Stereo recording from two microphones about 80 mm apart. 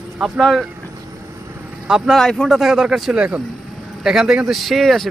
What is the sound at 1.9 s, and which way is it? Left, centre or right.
Speech, centre.